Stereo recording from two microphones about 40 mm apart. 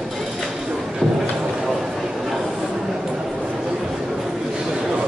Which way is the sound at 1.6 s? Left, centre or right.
Centre.